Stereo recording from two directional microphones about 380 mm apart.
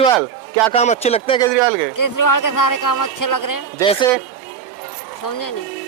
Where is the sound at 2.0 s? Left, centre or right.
Left.